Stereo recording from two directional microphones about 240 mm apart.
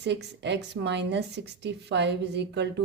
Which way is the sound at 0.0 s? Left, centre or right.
Right.